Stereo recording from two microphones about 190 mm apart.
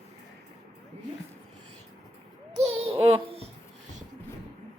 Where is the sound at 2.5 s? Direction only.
35° right (ahead or behind).